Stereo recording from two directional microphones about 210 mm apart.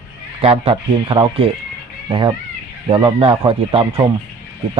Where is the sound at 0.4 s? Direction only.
25° right (ahead or behind).